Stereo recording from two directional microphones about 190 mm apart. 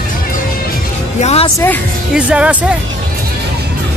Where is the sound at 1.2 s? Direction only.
35° left (ahead or behind).